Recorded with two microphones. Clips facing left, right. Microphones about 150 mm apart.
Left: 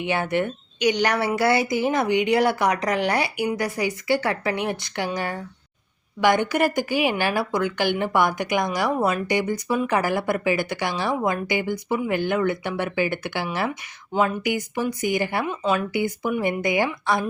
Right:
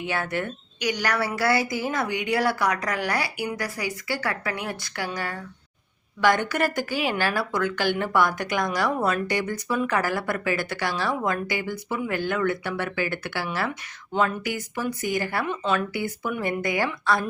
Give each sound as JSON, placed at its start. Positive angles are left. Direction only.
{"t": 0.0, "sound": "a woman's voice", "side_deg": 20}
{"t": 14.1, "sound": "speech", "side_deg": 5}